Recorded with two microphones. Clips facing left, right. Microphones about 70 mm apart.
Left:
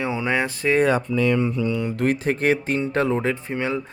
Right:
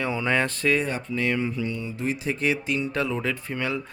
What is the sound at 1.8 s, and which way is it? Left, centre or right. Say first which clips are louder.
Speech: left 7 dB; left.